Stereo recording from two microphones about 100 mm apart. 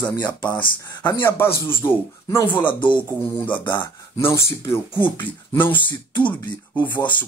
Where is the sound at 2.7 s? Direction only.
55° left (ahead or behind).